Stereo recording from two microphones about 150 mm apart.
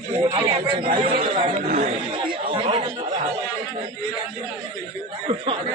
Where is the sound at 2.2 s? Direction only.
35° right (ahead or behind).